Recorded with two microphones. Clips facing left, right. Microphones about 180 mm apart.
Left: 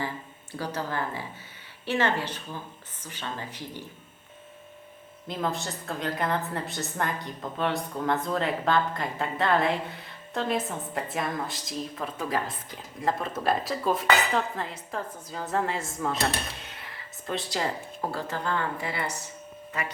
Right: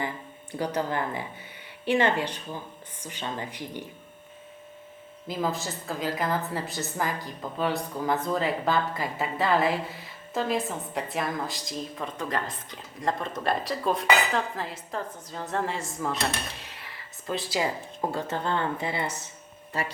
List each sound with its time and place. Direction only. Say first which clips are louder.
0.5 s speech: right 3 dB; 15° right (ahead or behind)
5.3 s a woman's voice: right 1 dB; centre (ahead or behind)
18.1 s speech: right 1 dB; 20° right (ahead or behind)